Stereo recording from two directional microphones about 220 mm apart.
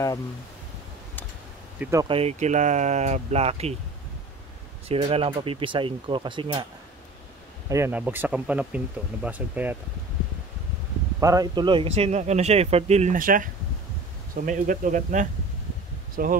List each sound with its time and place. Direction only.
1.8 s speech: 15° right (ahead or behind)
2.0 s speech: 25° right (ahead or behind)
4.8 s a man's voice: 25° right (ahead or behind)
7.7 s speech: 10° right (ahead or behind)
11.1 s a man's voice: 15° right (ahead or behind); by 16.3 s 40° right (ahead or behind)